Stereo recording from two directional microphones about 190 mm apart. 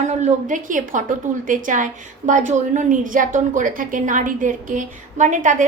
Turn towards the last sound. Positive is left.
turn(degrees=-40)  # may be behind; listen again after turning